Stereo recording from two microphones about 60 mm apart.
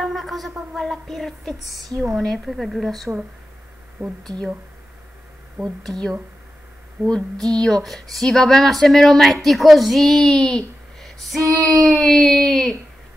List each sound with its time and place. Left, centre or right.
0.0 s speech: centre
2.1 s a sound: centre
2.4 s speech: centre
5.6 s speech: centre
7.1 s speech: centre
11.4 s child singing: right
11.8 s a sound: centre